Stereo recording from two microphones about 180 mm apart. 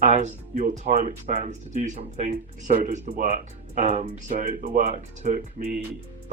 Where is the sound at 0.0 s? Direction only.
40° right (ahead or behind).